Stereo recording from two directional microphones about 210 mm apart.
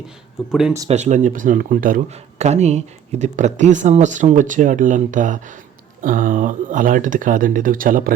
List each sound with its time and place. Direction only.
0.5 s speech: 5° right (ahead or behind)
0.9 s speech: 35° right (ahead or behind)
2.4 s speech: 30° right (ahead or behind)